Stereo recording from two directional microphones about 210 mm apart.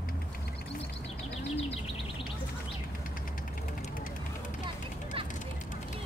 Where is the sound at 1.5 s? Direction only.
30° left (ahead or behind).